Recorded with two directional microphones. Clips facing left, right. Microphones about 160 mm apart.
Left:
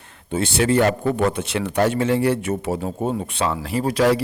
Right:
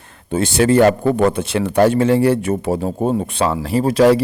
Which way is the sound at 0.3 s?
45° right (ahead or behind).